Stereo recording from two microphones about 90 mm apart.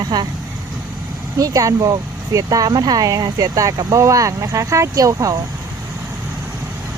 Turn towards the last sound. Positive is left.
turn(degrees=-40)  # may be behind; listen again after turning